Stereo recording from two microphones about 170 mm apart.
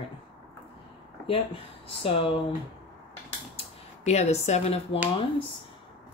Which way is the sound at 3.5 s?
40° left (ahead or behind).